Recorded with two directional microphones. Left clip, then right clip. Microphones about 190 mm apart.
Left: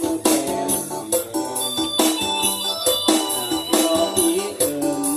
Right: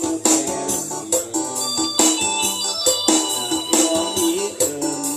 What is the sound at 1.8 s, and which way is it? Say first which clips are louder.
Music: right 1 dB; 25° right (ahead or behind).